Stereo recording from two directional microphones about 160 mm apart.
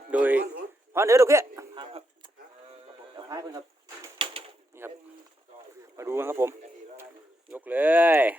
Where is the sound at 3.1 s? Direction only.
25° right (ahead or behind).